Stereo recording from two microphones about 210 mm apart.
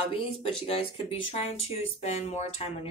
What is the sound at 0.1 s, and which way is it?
Speech, 25° left (ahead or behind).